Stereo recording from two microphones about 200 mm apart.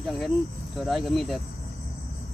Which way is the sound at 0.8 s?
Centre (ahead or behind).